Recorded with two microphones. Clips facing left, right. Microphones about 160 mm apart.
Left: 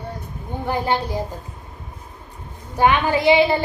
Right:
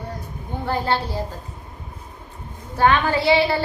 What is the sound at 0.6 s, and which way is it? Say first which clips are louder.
Speech: left 1 dB; 15° left (ahead or behind).